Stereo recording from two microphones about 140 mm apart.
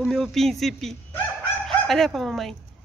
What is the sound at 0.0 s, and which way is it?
A woman's voice, centre (ahead or behind).